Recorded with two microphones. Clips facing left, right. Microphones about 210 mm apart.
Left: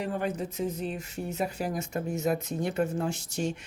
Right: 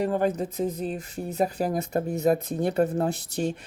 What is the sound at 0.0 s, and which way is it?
Speech, 40° right (ahead or behind).